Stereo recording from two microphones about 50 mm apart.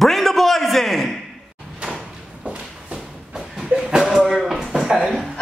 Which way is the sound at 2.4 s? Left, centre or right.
Right.